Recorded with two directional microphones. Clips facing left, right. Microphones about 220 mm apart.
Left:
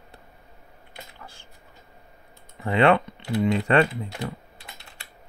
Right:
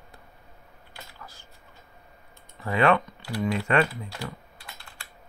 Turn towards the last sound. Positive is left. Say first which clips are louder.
# left 1 dB
turn(degrees=20)  # may be behind; listen again after turning